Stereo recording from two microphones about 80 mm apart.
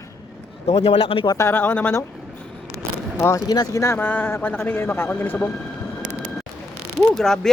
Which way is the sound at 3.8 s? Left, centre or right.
Left.